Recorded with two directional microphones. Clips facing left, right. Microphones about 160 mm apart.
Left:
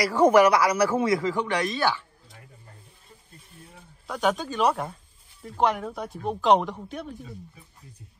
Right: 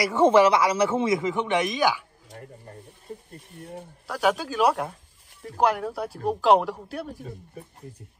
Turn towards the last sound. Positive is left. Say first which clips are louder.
# right 4 dB
turn(degrees=-50)  # may be behind; listen again after turning